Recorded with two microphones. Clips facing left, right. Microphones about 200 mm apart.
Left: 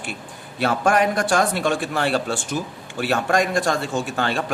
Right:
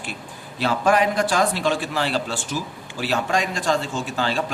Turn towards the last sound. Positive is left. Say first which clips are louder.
# left 1 dB
turn(degrees=55)  # may be behind; listen again after turning